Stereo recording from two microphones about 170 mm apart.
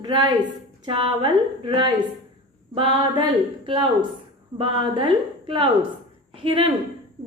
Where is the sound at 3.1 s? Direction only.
25° right (ahead or behind).